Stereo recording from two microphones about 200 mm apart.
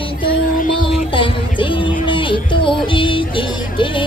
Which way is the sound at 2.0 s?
25° left (ahead or behind).